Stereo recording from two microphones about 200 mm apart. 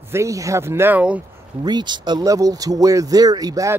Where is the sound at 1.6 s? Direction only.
20° right (ahead or behind).